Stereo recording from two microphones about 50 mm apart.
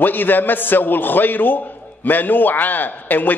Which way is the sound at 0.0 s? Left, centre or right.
Left.